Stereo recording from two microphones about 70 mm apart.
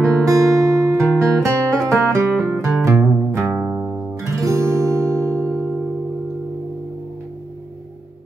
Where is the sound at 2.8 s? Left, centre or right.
Right.